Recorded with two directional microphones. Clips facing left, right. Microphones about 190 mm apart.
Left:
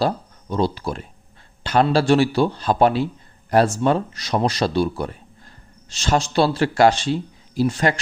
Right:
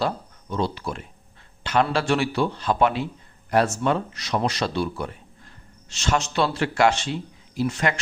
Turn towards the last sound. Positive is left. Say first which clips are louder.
# left 4 dB
turn(degrees=35)  # may be behind; listen again after turning